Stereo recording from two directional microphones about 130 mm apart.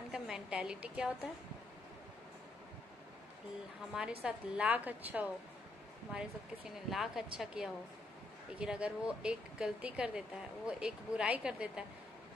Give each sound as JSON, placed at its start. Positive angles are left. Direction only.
{"t": 0.1, "sound": "a woman's voice", "side_deg": -5}
{"t": 3.9, "sound": "speech", "side_deg": -5}